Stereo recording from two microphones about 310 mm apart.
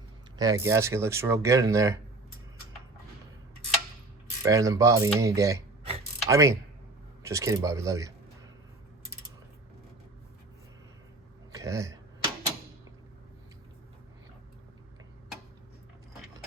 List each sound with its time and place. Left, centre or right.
0.3 s speech: centre
4.4 s speech: centre
11.5 s speech: centre